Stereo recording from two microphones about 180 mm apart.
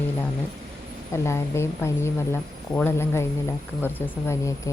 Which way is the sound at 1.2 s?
15° left (ahead or behind).